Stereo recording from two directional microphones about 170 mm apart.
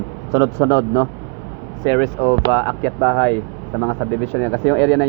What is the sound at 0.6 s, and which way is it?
Speech, 10° left (ahead or behind).